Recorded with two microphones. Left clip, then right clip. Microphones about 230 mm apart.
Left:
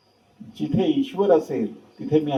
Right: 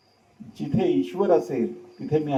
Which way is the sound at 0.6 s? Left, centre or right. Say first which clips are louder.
Left 1 dB; left.